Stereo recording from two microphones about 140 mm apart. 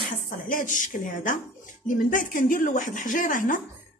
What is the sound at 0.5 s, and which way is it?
A woman's voice, 70° left (ahead or behind).